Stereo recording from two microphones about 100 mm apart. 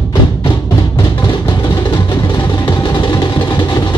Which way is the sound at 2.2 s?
40° left (ahead or behind).